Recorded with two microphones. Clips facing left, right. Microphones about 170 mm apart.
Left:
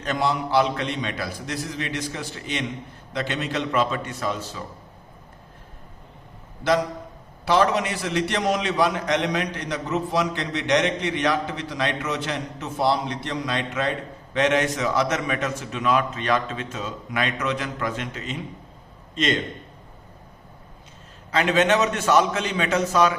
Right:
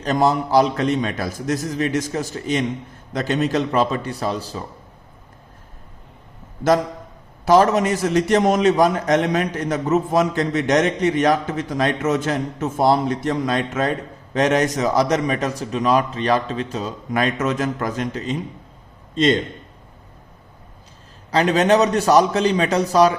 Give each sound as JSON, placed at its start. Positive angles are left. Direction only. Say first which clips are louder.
{"t": 0.0, "sound": "a man's voice", "louder": "right 6 dB", "side_deg": -40}
{"t": 7.4, "sound": "a man's voice", "louder": "right 6 dB", "side_deg": -45}
{"t": 21.2, "sound": "a man's voice", "louder": "right 4 dB", "side_deg": -40}